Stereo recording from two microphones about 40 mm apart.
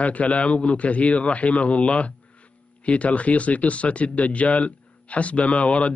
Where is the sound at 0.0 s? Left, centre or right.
Left.